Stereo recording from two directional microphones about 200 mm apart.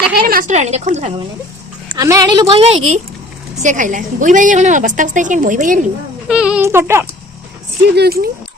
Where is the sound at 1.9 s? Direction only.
15° right (ahead or behind).